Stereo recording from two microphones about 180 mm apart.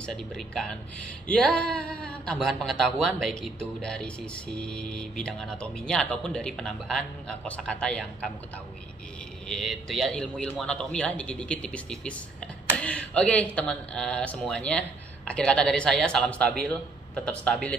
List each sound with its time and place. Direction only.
0.0 s a man's voice: 5° left (ahead or behind)
9.5 s a man's voice: centre (ahead or behind)